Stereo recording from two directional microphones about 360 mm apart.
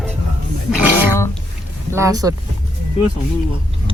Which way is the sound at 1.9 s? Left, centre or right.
Centre.